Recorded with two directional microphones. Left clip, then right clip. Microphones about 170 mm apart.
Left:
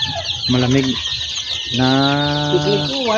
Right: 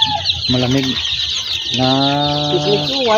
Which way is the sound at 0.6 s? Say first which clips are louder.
Even; 5° left (ahead or behind).